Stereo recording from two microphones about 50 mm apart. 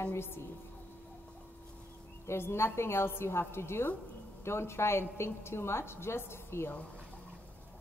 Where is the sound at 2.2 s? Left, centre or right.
Left.